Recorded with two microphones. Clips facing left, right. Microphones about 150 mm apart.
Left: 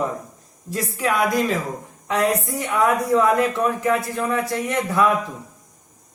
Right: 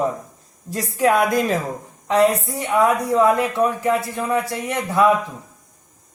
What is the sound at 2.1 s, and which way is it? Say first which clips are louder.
Speech: right 4 dB; 30° right (ahead or behind).